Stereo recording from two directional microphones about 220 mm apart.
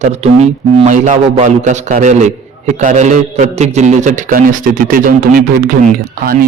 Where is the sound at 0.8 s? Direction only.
30° right (ahead or behind).